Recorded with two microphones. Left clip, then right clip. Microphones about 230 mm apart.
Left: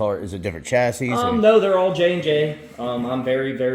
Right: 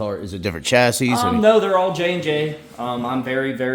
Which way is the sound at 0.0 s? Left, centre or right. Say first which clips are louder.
Left 2 dB; right.